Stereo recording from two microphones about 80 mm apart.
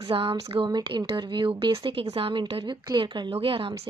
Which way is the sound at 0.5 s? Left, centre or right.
Right.